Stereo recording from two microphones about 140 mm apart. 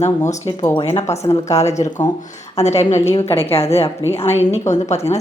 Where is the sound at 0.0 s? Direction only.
55° left (ahead or behind).